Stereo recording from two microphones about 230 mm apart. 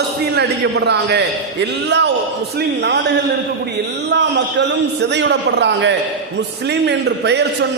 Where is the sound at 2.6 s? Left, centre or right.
Right.